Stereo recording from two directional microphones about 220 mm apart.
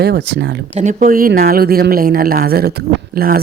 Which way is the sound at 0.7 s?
35° right (ahead or behind).